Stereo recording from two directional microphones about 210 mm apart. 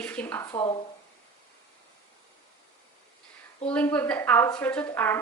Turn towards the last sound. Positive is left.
turn(degrees=10)  # may be behind; listen again after turning